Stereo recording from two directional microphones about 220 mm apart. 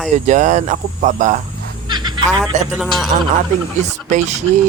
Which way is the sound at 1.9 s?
20° right (ahead or behind).